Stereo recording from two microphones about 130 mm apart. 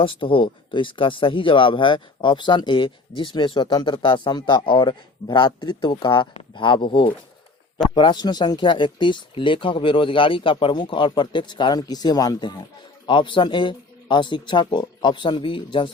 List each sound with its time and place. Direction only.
0.0 s speech: 40° left (ahead or behind)